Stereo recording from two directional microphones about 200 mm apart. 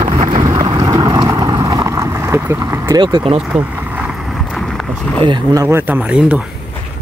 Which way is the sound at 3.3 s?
5° right (ahead or behind).